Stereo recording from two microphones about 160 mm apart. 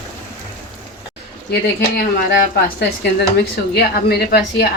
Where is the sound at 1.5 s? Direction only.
75° left (ahead or behind).